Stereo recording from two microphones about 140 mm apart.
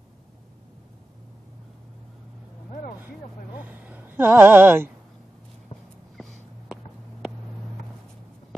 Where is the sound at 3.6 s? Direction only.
10° right (ahead or behind).